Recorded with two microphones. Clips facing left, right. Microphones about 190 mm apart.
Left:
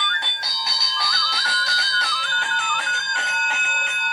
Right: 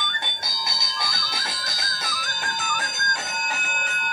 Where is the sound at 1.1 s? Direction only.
50° right (ahead or behind).